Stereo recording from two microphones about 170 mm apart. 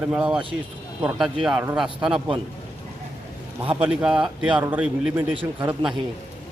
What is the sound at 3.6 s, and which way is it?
Speech, 30° right (ahead or behind).